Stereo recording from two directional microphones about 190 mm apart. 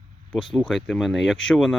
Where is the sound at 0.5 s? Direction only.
Centre (ahead or behind).